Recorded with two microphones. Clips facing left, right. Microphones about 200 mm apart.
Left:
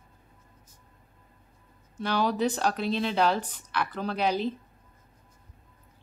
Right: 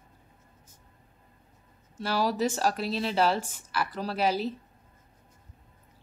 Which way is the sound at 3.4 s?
45° right (ahead or behind).